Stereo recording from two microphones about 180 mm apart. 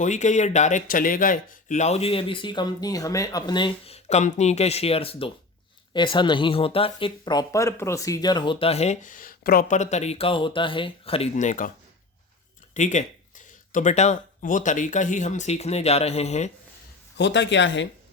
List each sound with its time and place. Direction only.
0.0 s speech: 40° left (ahead or behind)
12.7 s speech: 40° left (ahead or behind)
17.2 s speech: 75° left (ahead or behind)